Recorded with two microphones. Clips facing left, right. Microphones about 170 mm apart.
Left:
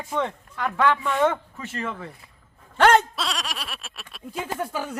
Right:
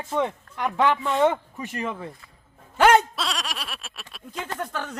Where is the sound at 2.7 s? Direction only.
10° right (ahead or behind); by 4.9 s 10° left (ahead or behind).